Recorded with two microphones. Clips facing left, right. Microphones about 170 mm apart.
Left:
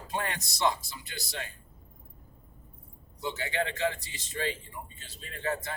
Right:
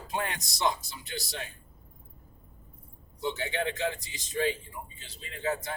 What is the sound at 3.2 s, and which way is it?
A man's voice, 20° right (ahead or behind).